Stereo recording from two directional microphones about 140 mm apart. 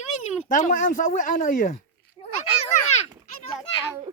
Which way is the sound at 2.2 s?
30° left (ahead or behind).